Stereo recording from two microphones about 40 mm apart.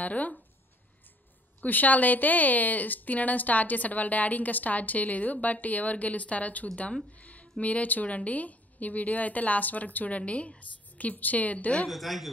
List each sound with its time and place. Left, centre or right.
0.0 s speech: left
1.6 s speech: left
7.2 s a sound: left
7.6 s speech: left
11.9 s speech: centre